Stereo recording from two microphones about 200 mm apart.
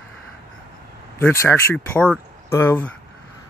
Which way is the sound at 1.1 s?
15° left (ahead or behind).